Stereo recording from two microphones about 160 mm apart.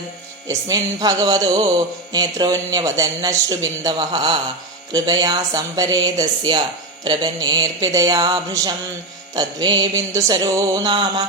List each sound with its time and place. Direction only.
0.4 s a man's voice: 20° right (ahead or behind)